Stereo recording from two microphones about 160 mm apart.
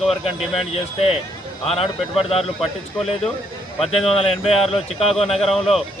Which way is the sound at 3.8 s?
35° left (ahead or behind).